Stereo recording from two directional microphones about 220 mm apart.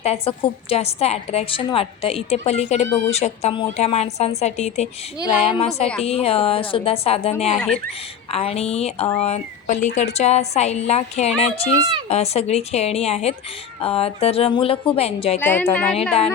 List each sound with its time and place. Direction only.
0.0 s a woman's voice: 25° left (ahead or behind)
15.4 s a woman's voice: 10° left (ahead or behind)